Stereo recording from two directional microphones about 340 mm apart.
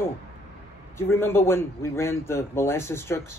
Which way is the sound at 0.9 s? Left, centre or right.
Centre.